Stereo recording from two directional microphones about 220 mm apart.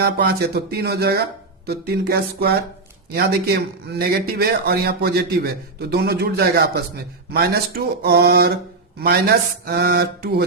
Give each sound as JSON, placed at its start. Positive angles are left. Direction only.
{"t": 0.0, "sound": "a man's voice", "side_deg": -45}